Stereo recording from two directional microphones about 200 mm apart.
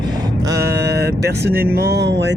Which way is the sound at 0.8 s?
55° right (ahead or behind).